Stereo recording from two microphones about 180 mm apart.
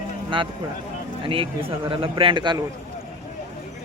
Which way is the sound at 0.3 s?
30° right (ahead or behind).